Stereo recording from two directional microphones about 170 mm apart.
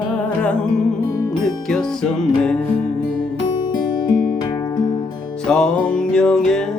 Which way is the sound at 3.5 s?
25° left (ahead or behind).